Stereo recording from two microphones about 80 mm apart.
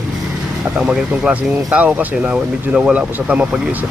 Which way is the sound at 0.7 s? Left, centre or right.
Centre.